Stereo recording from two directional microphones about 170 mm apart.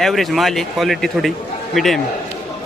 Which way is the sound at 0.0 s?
Centre (ahead or behind).